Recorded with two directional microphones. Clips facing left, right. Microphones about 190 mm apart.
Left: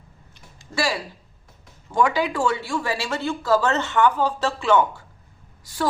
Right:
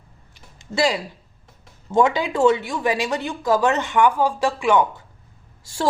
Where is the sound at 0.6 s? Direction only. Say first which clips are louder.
Right 4 dB; 20° right (ahead or behind).